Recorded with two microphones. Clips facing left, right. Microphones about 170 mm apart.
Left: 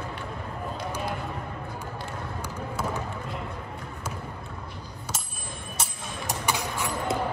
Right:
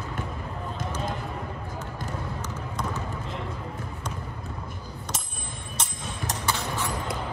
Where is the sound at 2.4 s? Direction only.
10° left (ahead or behind).